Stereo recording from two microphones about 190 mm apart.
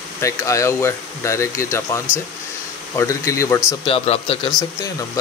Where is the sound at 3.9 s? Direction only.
30° left (ahead or behind).